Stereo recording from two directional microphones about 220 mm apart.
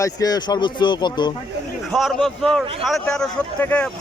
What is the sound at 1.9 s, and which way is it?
A man's voice, centre (ahead or behind).